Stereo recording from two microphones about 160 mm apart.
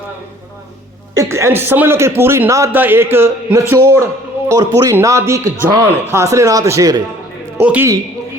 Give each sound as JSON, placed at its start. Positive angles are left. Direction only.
{"t": 1.2, "sound": "a man's voice", "side_deg": -15}
{"t": 7.6, "sound": "a man's voice", "side_deg": -10}